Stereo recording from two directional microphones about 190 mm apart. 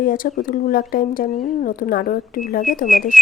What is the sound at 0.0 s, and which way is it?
Speech, 45° left (ahead or behind).